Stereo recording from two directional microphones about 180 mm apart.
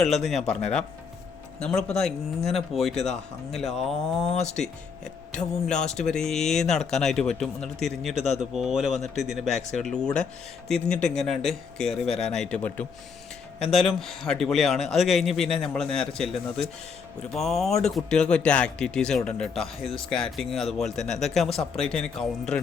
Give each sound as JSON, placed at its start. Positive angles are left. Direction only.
{"t": 0.2, "sound": "speech", "side_deg": 0}
{"t": 4.4, "sound": "speech", "side_deg": 40}
{"t": 5.6, "sound": "speech", "side_deg": 5}